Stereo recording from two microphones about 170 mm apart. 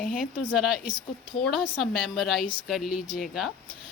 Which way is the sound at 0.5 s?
Centre (ahead or behind).